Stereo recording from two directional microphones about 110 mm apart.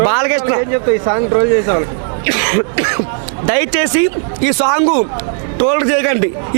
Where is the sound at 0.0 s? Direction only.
20° right (ahead or behind).